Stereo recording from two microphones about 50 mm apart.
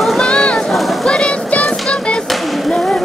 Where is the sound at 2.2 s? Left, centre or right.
Centre.